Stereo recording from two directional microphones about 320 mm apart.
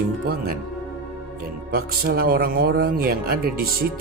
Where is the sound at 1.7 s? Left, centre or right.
Right.